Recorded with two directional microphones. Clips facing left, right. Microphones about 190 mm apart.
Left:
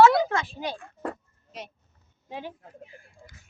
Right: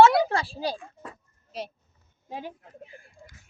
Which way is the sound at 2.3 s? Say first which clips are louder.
Even; 45° right (ahead or behind).